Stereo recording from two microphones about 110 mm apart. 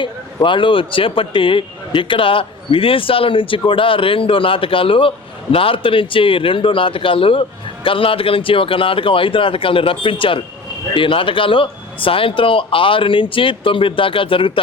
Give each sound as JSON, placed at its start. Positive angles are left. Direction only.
{"t": 0.0, "sound": "speech", "side_deg": 45}